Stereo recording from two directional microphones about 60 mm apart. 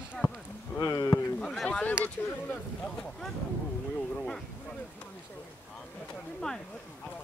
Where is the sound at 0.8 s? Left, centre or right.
Left.